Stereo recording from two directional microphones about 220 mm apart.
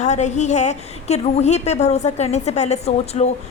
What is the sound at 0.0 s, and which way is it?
A woman's voice, 30° left (ahead or behind).